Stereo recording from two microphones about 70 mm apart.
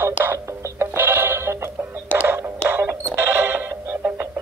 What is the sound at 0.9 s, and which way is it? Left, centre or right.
Music, right.